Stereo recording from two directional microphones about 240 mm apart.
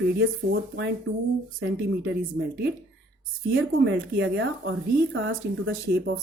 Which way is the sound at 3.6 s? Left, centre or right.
Right.